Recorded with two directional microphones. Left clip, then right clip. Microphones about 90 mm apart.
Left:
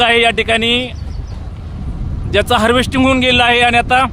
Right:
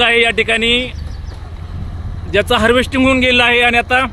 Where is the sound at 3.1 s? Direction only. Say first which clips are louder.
Even; 40° left (ahead or behind).